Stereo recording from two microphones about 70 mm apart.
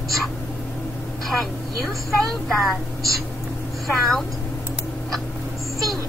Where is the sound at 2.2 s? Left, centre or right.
Centre.